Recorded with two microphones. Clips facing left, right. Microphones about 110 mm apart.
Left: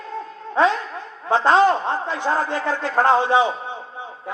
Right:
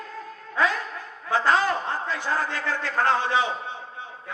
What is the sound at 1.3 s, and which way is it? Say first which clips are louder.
A man's voice: left 7 dB; 25° left (ahead or behind).